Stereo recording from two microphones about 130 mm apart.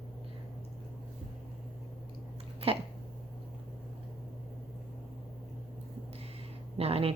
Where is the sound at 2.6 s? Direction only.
45° right (ahead or behind).